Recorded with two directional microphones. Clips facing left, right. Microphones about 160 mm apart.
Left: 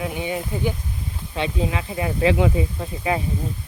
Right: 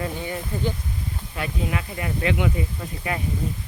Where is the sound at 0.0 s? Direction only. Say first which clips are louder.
Left 3 dB; 15° left (ahead or behind).